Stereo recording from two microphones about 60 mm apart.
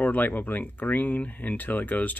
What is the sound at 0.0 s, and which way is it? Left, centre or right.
Speech, left.